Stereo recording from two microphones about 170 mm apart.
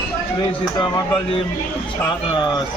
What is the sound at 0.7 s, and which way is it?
Speech, 25° left (ahead or behind).